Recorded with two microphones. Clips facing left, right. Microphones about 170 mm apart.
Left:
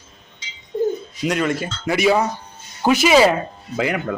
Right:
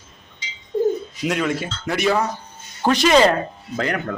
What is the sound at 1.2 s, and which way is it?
Speech, centre (ahead or behind).